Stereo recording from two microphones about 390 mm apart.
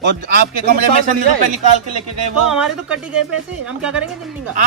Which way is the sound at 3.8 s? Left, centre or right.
Centre.